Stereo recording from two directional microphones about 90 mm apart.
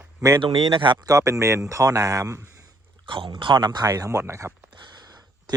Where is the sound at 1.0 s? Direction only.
40° right (ahead or behind).